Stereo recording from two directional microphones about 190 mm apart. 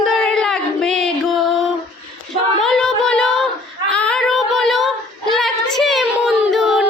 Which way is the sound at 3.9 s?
5° left (ahead or behind).